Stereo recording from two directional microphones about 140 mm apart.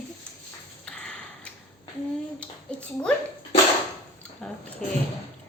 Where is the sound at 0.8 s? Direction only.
5° left (ahead or behind).